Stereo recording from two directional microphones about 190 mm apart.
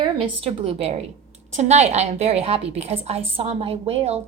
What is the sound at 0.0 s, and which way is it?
A woman's voice, 30° right (ahead or behind).